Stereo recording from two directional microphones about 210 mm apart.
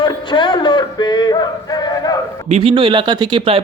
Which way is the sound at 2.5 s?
30° right (ahead or behind).